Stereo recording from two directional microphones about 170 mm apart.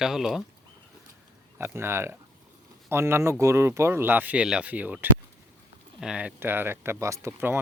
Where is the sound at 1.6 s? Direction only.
15° right (ahead or behind).